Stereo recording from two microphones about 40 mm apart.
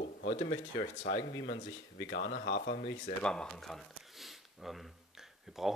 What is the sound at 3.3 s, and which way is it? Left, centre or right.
Speech, left.